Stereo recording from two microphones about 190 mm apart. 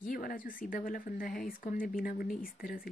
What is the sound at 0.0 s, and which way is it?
Speech, 50° left (ahead or behind).